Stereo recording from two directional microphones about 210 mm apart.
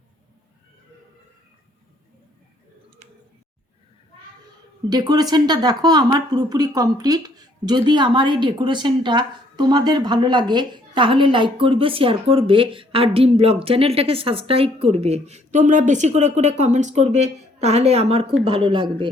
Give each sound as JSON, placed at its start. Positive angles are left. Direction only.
{"t": 4.9, "sound": "a woman's voice", "side_deg": -20}